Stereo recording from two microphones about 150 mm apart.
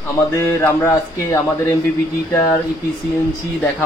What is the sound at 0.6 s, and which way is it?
Speech, 15° left (ahead or behind).